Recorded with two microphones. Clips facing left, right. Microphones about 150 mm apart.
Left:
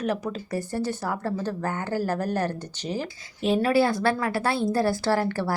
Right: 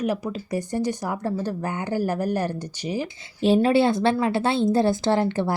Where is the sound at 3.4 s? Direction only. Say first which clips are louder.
Right 3 dB; 30° right (ahead or behind).